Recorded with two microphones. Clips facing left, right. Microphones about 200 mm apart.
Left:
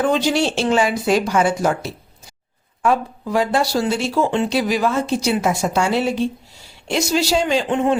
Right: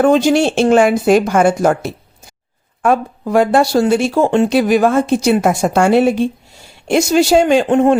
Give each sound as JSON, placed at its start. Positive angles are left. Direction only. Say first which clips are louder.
{"t": 0.0, "sound": "speech", "louder": "right 7 dB", "side_deg": -50}